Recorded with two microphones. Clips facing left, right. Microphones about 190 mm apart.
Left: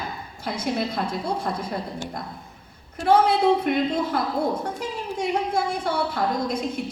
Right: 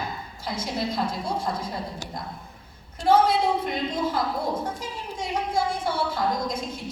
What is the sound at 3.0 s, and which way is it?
A woman's voice, 60° left (ahead or behind).